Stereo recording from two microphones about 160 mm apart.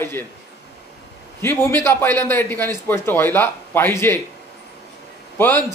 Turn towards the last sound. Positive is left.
turn(degrees=10)  # may be behind; listen again after turning